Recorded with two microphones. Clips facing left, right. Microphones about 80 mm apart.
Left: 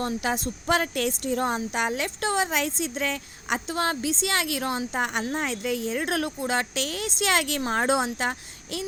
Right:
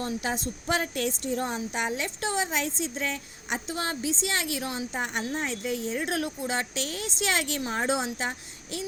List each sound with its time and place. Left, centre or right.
0.0 s speech: left
5.3 s speech: left